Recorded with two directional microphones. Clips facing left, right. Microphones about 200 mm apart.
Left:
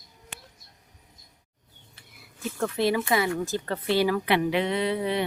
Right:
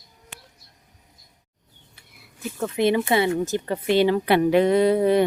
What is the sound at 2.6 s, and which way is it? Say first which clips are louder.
Speech: right 4 dB; 20° right (ahead or behind).